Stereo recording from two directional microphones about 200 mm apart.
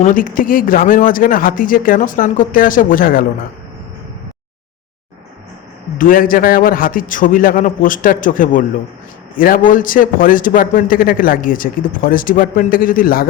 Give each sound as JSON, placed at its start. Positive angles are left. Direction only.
{"t": 0.0, "sound": "a man's voice", "side_deg": 40}
{"t": 6.0, "sound": "a man's voice", "side_deg": 45}